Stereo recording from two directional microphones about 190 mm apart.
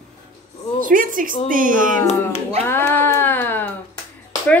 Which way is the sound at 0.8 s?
45° right (ahead or behind).